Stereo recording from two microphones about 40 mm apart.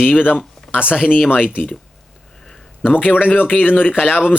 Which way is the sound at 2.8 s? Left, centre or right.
Left.